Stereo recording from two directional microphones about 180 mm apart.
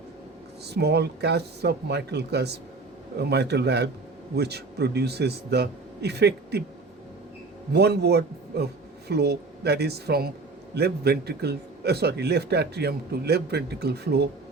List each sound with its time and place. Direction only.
0.7 s a man's voice: 65° right (ahead or behind)
7.7 s a man's voice: 65° right (ahead or behind)